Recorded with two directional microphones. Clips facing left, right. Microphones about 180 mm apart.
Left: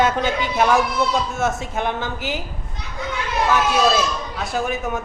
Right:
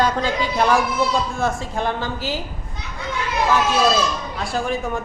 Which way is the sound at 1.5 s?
20° left (ahead or behind).